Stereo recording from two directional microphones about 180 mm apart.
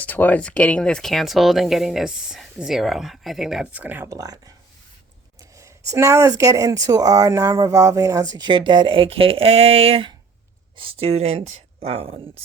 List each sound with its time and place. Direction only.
0.0 s speech: 10° left (ahead or behind); by 12.3 s 30° right (ahead or behind)